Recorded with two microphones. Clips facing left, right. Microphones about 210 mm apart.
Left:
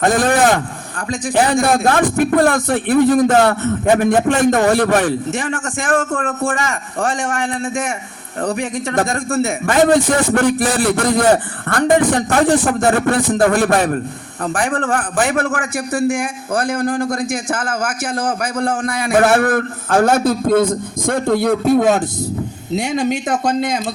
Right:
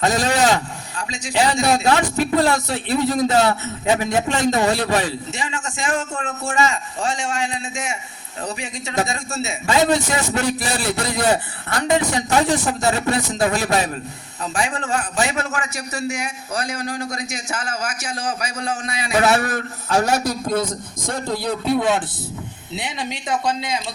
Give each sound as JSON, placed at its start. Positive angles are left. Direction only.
{"t": 0.0, "sound": "a man's voice", "side_deg": 55}